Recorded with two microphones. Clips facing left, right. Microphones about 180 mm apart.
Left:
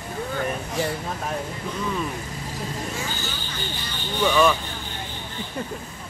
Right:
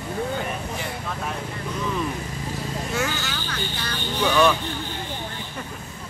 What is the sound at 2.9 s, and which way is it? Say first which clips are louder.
Speech: right 5 dB; 75° right (ahead or behind).